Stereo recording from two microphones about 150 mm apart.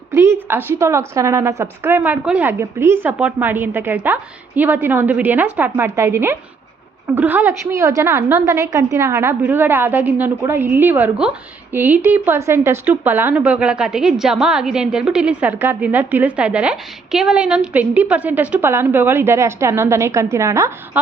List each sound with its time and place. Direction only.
0.1 s a woman's voice: 20° right (ahead or behind)